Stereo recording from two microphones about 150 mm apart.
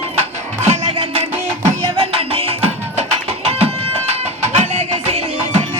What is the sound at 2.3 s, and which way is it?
Music, 40° right (ahead or behind).